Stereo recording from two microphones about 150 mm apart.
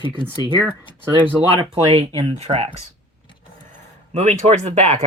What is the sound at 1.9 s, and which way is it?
Speech, 45° right (ahead or behind).